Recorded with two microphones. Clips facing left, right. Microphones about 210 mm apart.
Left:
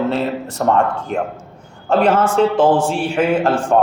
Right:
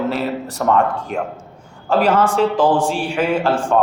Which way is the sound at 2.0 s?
30° left (ahead or behind).